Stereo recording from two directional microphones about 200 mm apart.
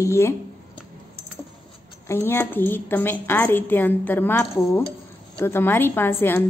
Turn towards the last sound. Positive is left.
turn(degrees=10)  # may be behind; listen again after turning